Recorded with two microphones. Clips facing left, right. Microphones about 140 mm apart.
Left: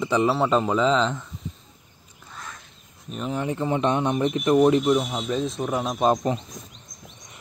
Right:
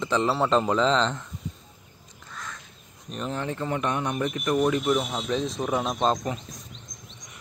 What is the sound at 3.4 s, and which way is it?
Speech, 15° left (ahead or behind).